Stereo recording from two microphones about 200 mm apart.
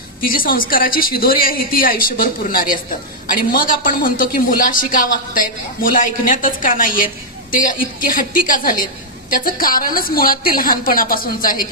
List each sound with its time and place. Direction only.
0.2 s a woman's voice: 45° left (ahead or behind)